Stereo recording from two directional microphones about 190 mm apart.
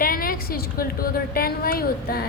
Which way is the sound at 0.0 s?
50° left (ahead or behind).